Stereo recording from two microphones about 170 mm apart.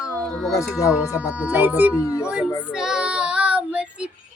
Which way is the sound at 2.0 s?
15° left (ahead or behind).